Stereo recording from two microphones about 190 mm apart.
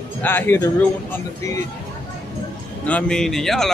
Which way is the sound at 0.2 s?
10° left (ahead or behind).